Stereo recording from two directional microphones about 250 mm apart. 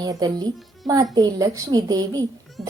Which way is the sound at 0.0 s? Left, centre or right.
Centre.